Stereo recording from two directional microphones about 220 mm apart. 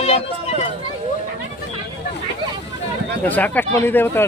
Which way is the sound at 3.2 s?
5° left (ahead or behind).